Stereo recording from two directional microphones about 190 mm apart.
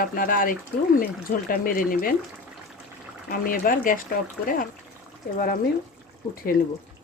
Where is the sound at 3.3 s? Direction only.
50° left (ahead or behind).